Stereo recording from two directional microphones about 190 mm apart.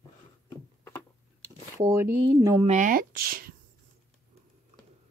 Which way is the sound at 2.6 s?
40° right (ahead or behind).